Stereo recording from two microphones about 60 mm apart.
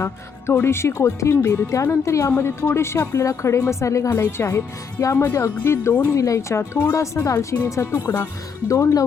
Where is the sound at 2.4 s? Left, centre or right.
Left.